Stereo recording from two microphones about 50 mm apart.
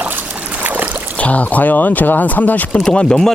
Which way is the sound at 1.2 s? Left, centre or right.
Left.